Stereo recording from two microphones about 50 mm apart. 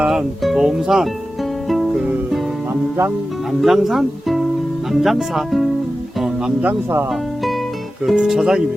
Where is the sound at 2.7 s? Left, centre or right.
Right.